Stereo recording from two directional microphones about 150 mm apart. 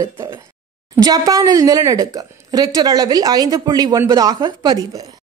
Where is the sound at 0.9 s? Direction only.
25° right (ahead or behind).